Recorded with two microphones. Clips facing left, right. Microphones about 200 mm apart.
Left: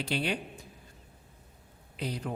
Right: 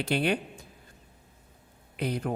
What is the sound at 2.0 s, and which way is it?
Speech, 55° right (ahead or behind).